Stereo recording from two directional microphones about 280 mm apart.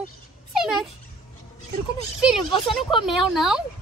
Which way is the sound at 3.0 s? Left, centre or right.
Centre.